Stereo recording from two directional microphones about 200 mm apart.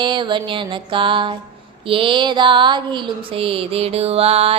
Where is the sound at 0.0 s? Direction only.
25° right (ahead or behind).